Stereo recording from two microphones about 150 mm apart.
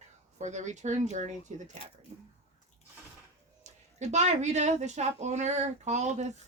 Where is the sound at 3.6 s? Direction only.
50° right (ahead or behind).